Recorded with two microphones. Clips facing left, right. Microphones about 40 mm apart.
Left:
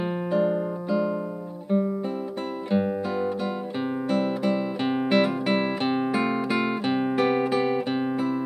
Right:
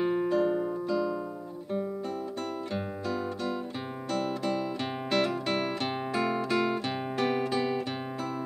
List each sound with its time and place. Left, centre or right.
0.0 s music: centre
4.1 s music: centre